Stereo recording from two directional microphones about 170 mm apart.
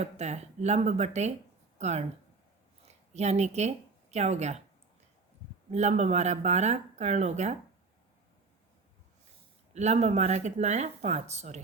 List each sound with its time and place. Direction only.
0.0 s speech: 40° right (ahead or behind)
5.7 s speech: 40° right (ahead or behind)
9.7 s speech: 40° right (ahead or behind)